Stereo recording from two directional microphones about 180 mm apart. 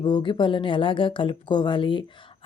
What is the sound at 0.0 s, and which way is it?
Speech, 25° left (ahead or behind).